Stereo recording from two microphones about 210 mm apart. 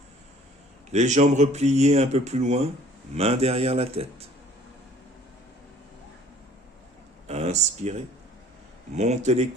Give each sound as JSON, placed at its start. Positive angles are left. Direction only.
{"t": 0.9, "sound": "speech", "side_deg": -35}
{"t": 7.3, "sound": "speech", "side_deg": -30}